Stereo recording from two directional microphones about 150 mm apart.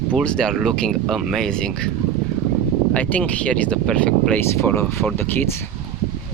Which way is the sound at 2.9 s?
10° left (ahead or behind).